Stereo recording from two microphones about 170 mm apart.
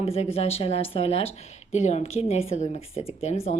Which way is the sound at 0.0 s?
35° left (ahead or behind).